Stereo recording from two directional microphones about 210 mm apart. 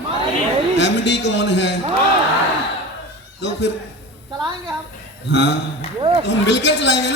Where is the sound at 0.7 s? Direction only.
55° left (ahead or behind).